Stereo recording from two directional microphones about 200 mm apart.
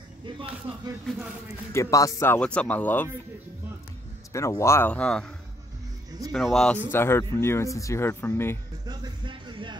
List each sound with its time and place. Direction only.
1.7 s speech: 15° left (ahead or behind)
4.3 s speech: 15° left (ahead or behind)
6.3 s speech: centre (ahead or behind)
8.8 s speech: 20° right (ahead or behind)